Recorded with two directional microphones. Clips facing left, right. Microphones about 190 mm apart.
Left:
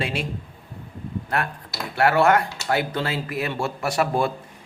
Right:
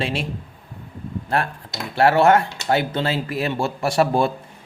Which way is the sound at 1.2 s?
30° right (ahead or behind).